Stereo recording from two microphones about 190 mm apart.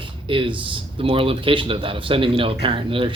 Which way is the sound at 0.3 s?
25° right (ahead or behind).